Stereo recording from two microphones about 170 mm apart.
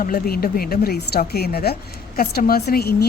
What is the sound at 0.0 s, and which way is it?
A woman's voice, 60° left (ahead or behind).